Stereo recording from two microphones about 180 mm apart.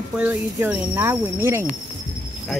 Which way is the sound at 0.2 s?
10° right (ahead or behind).